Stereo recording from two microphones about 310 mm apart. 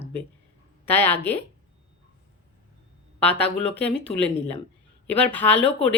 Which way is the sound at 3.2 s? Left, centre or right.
Centre.